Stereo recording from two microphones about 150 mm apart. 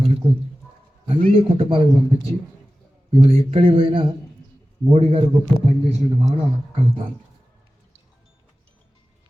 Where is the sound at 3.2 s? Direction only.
40° right (ahead or behind).